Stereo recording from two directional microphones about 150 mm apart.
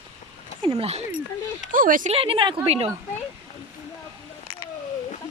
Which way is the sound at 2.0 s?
40° right (ahead or behind).